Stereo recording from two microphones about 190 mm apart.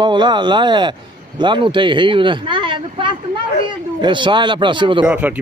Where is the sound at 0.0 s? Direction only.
25° right (ahead or behind).